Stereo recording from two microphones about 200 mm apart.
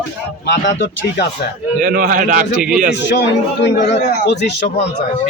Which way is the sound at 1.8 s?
45° right (ahead or behind).